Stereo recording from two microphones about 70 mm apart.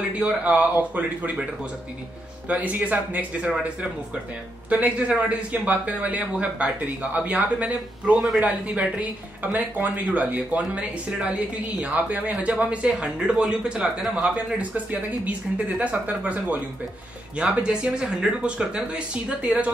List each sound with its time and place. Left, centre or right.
0.2 s speech: centre
2.4 s speech: right
4.6 s speech: centre